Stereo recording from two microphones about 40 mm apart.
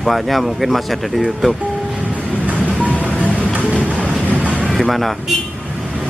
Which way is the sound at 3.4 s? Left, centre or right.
Right.